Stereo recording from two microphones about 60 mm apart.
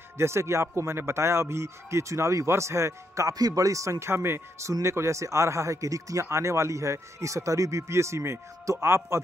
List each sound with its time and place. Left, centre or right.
0.2 s speech: right
6.2 s speech: right